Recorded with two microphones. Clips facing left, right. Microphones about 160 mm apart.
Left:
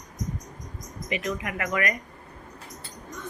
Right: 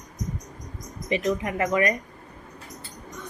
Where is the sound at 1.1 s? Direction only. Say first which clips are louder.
Right 5 dB; 30° right (ahead or behind).